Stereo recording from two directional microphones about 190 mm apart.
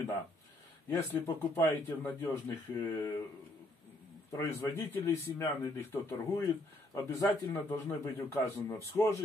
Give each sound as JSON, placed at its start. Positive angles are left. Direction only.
{"t": 0.8, "sound": "speech", "side_deg": 10}
{"t": 4.3, "sound": "speech", "side_deg": 15}